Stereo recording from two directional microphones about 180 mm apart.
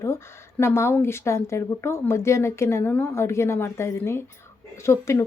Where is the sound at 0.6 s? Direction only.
15° left (ahead or behind).